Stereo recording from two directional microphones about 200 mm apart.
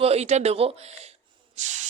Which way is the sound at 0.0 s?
30° right (ahead or behind).